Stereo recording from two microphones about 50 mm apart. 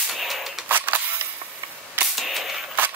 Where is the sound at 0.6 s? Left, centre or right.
Right.